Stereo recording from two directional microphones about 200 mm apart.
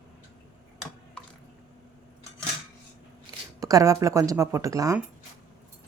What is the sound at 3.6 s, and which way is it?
Speech, 15° right (ahead or behind).